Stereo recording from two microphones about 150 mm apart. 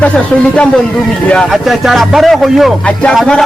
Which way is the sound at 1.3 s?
5° left (ahead or behind).